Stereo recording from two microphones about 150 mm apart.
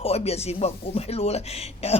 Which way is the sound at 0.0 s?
45° left (ahead or behind).